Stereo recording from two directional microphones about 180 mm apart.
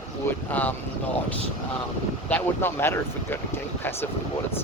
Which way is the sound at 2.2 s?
10° left (ahead or behind).